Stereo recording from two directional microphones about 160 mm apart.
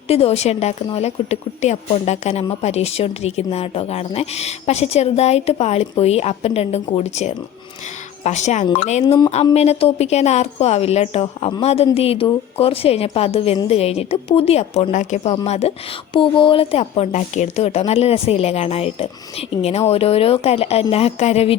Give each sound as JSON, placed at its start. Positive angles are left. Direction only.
{"t": 0.1, "sound": "speech", "side_deg": 40}